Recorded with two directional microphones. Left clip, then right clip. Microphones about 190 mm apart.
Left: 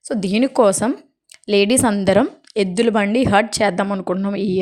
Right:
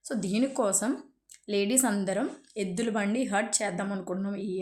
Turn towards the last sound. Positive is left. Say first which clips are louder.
# left 13 dB
turn(degrees=45)  # may be behind; listen again after turning